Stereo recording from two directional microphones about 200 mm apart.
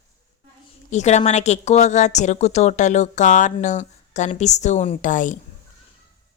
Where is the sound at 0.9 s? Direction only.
35° left (ahead or behind).